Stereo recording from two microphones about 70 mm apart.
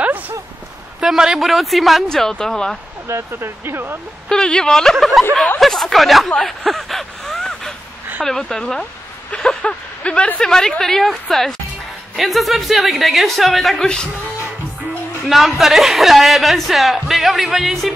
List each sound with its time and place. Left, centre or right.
0.0 s a sound: right
1.0 s a man's voice: centre
3.1 s speech: right
4.3 s speech: centre
6.4 s a sound: centre
8.2 s a man's voice: centre
15.2 s a man's voice: centre